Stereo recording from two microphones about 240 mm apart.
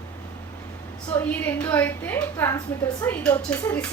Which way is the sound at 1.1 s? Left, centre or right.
Centre.